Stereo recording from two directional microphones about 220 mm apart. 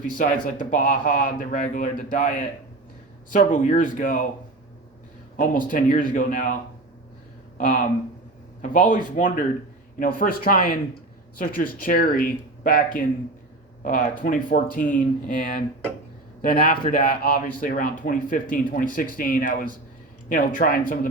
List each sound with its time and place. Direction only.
0.6 s speech: 35° left (ahead or behind)
5.4 s speech: 40° left (ahead or behind)
7.6 s speech: 40° left (ahead or behind)